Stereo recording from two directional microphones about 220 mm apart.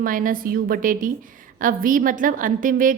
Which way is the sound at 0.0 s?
40° right (ahead or behind).